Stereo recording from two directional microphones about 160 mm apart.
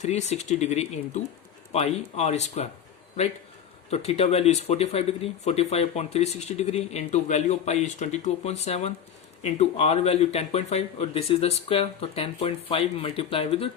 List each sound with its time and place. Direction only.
0.0 s speech: 45° left (ahead or behind)
3.8 s speech: 40° left (ahead or behind)